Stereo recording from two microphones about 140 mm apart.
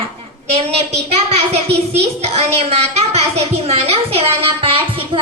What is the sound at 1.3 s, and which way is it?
A child's voice, 50° right (ahead or behind).